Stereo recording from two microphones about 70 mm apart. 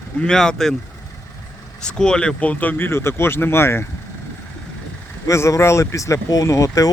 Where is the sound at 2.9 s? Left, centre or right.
Left.